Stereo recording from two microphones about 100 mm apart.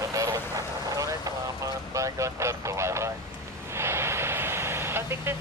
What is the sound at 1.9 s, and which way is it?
Vehicle, 30° right (ahead or behind).